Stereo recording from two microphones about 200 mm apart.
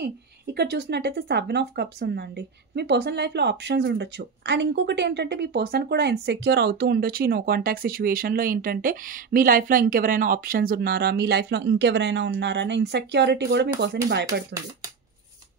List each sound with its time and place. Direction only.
0.6 s speech: 55° right (ahead or behind)